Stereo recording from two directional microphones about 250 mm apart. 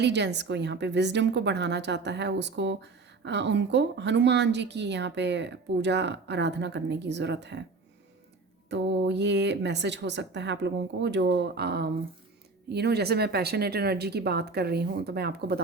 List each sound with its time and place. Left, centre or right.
0.0 s a woman's voice: right
8.7 s a woman's voice: right